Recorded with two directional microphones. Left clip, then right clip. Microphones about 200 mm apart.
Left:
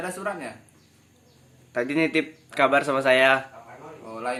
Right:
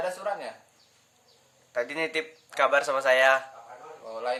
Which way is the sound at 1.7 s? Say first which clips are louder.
Left 5 dB; 15° left (ahead or behind).